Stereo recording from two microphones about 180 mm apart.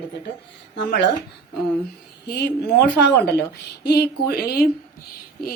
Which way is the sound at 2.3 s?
60° left (ahead or behind).